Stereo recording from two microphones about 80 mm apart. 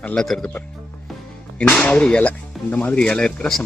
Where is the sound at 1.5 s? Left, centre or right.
Centre.